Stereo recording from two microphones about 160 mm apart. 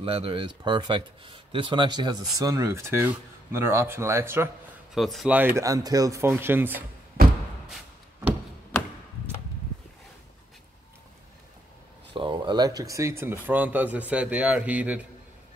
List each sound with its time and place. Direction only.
0.0 s speech: 35° right (ahead or behind); by 4.5 s 15° right (ahead or behind)
4.9 s speech: centre (ahead or behind)
5.3 s speech: 10° right (ahead or behind)
7.6 s a sound: 5° right (ahead or behind)
12.1 s speech: 30° right (ahead or behind); by 15.0 s 10° right (ahead or behind)